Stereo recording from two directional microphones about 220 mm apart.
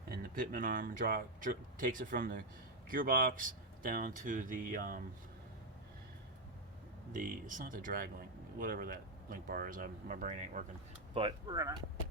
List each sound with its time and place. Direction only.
0.3 s speech: 40° right (ahead or behind)
7.1 s speech: 35° right (ahead or behind)
11.1 s speech: 20° right (ahead or behind)